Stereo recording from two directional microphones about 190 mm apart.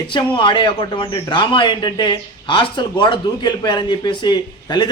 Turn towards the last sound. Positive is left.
turn(degrees=20)  # may be behind; listen again after turning